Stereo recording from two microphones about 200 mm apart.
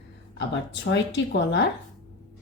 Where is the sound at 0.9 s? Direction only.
60° left (ahead or behind).